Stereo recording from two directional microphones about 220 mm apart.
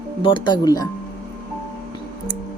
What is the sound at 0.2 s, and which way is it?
Speech, 20° left (ahead or behind).